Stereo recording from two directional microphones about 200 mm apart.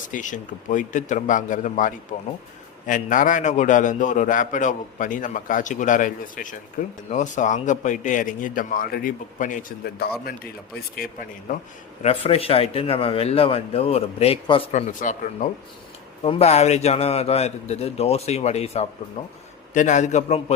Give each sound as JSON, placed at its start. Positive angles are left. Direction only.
{"t": 0.1, "sound": "a man's voice", "side_deg": 40}
{"t": 12.0, "sound": "a man's voice", "side_deg": 30}